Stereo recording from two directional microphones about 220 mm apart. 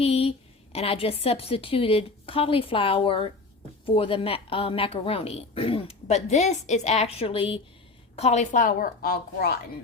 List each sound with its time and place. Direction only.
0.0 s a woman's voice: 25° left (ahead or behind); by 9.6 s 45° left (ahead or behind)